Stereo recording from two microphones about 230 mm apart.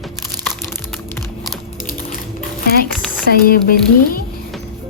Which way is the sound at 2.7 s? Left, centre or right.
Left.